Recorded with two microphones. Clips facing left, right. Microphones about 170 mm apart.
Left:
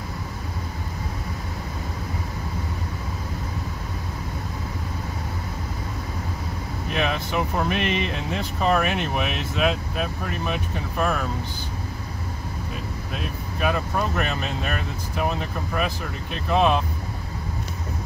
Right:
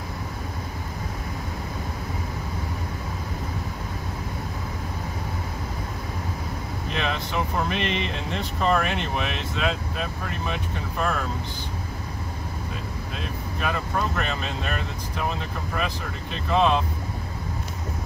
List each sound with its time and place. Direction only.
6.9 s speech: 10° left (ahead or behind)
13.6 s speech: 5° left (ahead or behind)
16.4 s speech: 10° left (ahead or behind)